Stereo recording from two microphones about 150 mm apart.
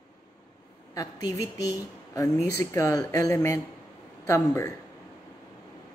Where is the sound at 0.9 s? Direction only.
20° left (ahead or behind).